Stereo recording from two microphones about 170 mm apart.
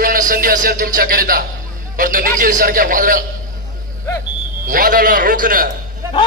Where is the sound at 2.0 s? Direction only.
55° right (ahead or behind).